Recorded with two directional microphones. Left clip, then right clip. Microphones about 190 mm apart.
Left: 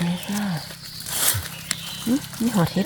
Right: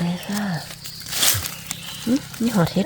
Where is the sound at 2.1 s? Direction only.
10° right (ahead or behind).